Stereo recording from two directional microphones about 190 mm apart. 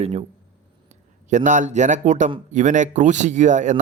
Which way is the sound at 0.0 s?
35° right (ahead or behind).